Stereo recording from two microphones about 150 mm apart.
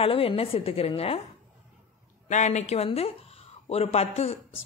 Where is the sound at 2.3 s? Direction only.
50° left (ahead or behind).